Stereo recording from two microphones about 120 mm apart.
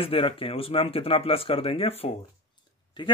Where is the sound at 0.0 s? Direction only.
50° left (ahead or behind).